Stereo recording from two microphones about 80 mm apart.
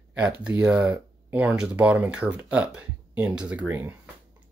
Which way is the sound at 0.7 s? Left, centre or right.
Centre.